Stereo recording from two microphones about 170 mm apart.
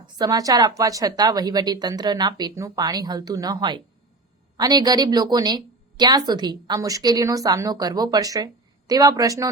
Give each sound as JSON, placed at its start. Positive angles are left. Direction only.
{"t": 0.0, "sound": "a woman's voice", "side_deg": -25}